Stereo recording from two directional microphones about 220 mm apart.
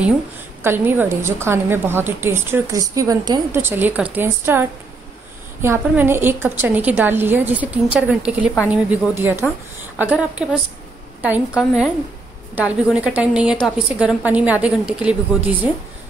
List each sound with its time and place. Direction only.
0.7 s a woman's voice: 10° right (ahead or behind)